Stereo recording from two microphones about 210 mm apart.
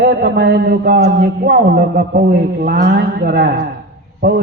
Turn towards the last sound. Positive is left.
turn(degrees=-45)  # may be behind; listen again after turning